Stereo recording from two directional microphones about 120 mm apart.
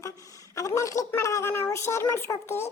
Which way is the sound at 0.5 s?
25° left (ahead or behind).